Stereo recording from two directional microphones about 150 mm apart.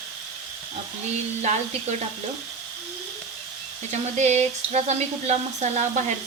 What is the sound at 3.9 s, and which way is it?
Frying, 50° right (ahead or behind).